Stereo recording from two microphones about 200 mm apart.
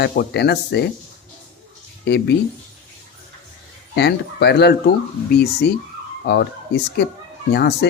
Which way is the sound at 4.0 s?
55° left (ahead or behind).